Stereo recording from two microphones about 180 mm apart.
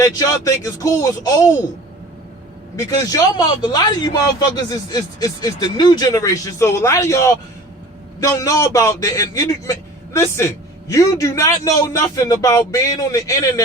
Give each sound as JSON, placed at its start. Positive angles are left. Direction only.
{"t": 0.0, "sound": "a man's voice", "side_deg": 20}
{"t": 2.7, "sound": "a man's voice", "side_deg": 20}